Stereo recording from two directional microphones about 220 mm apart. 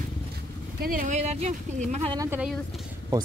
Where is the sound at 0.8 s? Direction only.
40° right (ahead or behind).